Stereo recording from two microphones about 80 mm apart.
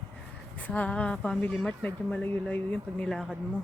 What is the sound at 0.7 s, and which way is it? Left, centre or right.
Speech, centre.